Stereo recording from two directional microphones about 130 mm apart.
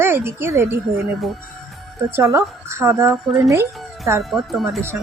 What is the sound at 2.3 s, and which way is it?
Speech, 20° right (ahead or behind).